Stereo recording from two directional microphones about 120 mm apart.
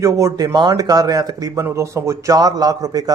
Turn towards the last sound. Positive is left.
turn(degrees=-30)  # may be behind; listen again after turning